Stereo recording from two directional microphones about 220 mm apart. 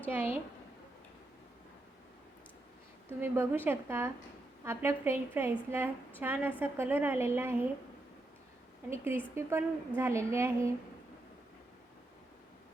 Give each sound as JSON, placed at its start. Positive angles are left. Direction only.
{"t": 0.1, "sound": "a woman's voice", "side_deg": -10}
{"t": 3.1, "sound": "a woman's voice", "side_deg": -10}
{"t": 8.9, "sound": "a woman's voice", "side_deg": -10}